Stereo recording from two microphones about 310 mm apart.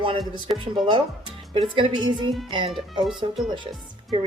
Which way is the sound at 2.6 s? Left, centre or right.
Centre.